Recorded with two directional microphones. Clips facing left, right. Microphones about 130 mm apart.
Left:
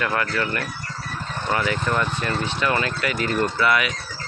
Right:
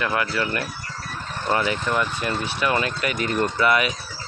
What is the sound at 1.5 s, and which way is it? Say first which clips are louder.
Speech: right 1 dB; 25° right (ahead or behind).